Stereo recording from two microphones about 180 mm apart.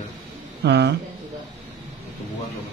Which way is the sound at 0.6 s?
70° right (ahead or behind).